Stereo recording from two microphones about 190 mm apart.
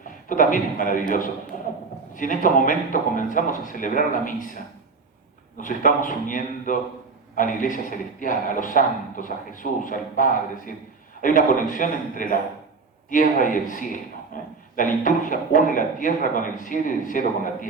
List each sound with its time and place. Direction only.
0.3 s a man's voice: 45° left (ahead or behind)
5.5 s a man's voice: 45° left (ahead or behind)